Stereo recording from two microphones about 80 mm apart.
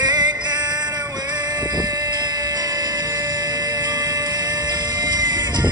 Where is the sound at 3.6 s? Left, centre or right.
Right.